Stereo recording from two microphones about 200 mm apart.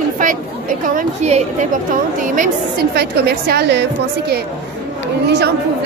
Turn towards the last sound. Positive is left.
turn(degrees=-60)  # may be behind; listen again after turning